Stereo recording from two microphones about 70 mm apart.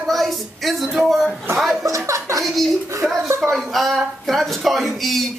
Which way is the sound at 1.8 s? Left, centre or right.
Right.